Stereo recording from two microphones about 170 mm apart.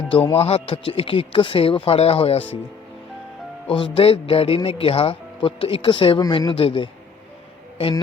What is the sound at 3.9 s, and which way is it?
Speech, 35° left (ahead or behind).